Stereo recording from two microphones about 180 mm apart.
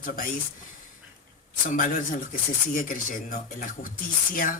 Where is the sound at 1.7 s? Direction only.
45° left (ahead or behind).